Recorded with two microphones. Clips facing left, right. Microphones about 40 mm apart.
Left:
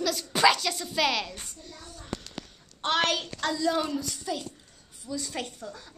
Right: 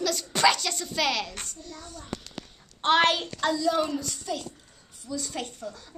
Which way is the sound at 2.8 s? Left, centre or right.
Right.